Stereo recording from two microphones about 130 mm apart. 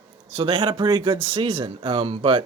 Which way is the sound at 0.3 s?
40° right (ahead or behind).